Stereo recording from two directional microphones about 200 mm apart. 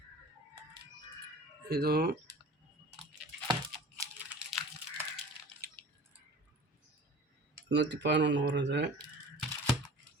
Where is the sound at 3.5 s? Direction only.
20° right (ahead or behind).